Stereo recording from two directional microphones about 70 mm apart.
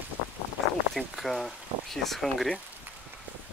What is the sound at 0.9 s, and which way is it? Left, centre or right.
Speech, centre.